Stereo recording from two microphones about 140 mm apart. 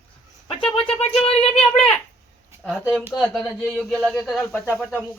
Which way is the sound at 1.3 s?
45° left (ahead or behind).